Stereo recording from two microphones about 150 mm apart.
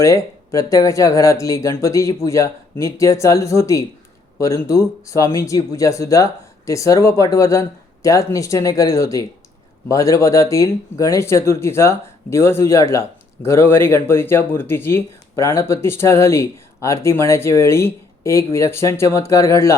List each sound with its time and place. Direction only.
0.0 s speech: 20° left (ahead or behind)